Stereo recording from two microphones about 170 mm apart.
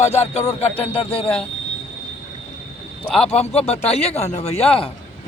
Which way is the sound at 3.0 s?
5° left (ahead or behind).